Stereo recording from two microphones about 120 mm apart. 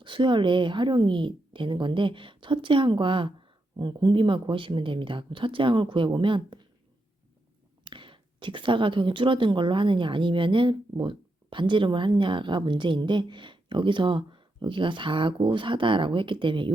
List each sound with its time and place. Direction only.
0.0 s speech: 40° right (ahead or behind)
7.9 s speech: 45° right (ahead or behind)